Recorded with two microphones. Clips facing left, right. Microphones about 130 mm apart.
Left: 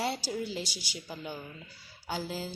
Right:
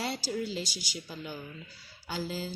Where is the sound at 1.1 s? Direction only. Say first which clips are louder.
Left 4 dB; 20° left (ahead or behind).